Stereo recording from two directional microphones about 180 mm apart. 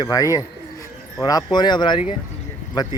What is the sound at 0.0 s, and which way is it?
Speech, 20° left (ahead or behind).